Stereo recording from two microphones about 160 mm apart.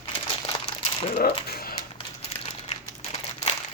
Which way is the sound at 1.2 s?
75° left (ahead or behind).